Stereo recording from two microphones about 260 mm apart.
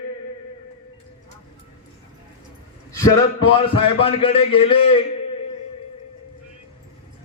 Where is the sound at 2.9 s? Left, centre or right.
Centre.